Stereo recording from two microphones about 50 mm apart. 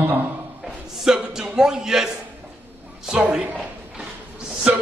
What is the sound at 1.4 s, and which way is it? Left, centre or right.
Speech, centre.